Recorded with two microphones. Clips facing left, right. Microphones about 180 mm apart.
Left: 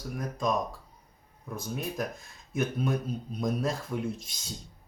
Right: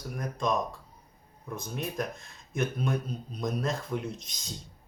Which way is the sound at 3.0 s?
5° left (ahead or behind).